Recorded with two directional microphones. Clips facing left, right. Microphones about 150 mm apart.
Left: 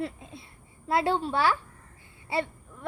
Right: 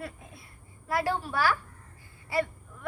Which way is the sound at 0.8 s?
25° left (ahead or behind).